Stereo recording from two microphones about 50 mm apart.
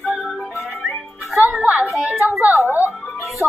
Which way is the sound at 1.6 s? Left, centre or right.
Right.